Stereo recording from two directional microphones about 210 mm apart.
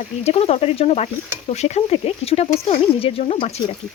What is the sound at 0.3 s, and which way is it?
Speech, 30° left (ahead or behind).